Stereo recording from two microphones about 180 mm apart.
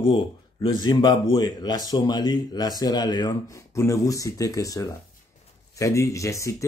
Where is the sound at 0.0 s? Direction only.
25° left (ahead or behind).